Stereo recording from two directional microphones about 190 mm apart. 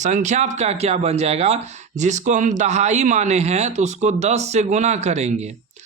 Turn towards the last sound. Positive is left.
turn(degrees=-35)  # may be behind; listen again after turning